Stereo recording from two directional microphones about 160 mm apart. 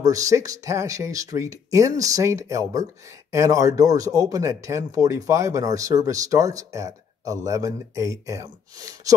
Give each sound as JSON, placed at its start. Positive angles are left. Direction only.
{"t": 0.0, "sound": "speech", "side_deg": -20}